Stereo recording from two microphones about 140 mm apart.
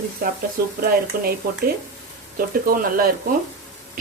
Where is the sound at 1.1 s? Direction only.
90° right.